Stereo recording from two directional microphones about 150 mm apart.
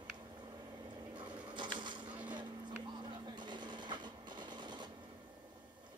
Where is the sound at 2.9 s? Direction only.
30° right (ahead or behind).